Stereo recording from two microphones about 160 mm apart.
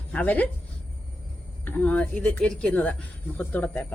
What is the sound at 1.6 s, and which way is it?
A woman's voice, 10° left (ahead or behind).